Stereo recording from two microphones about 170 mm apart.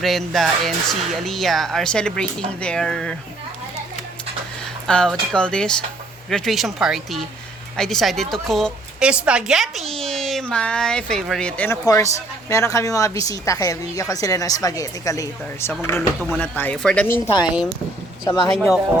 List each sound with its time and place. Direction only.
0.0 s a woman's voice: centre (ahead or behind)
4.9 s a woman's voice: 5° left (ahead or behind)
17.3 s a woman's voice: 5° right (ahead or behind)
18.3 s a woman's voice: 20° left (ahead or behind)